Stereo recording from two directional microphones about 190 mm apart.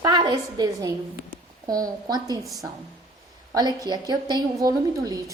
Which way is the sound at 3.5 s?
20° right (ahead or behind).